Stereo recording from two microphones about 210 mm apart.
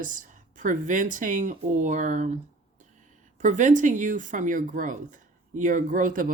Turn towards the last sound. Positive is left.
turn(degrees=-40)  # may be behind; listen again after turning